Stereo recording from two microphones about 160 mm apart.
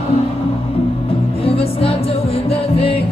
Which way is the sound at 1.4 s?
35° left (ahead or behind).